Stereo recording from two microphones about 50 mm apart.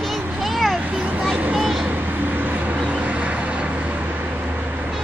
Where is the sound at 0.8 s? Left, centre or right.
Right.